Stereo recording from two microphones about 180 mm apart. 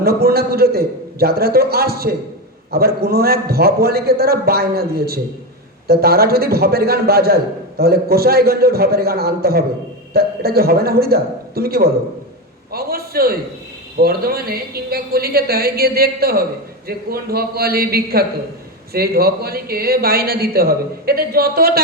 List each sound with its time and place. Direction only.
0.0 s speech: 60° right (ahead or behind)
12.7 s a sound: 60° right (ahead or behind)
14.0 s speech: 55° right (ahead or behind)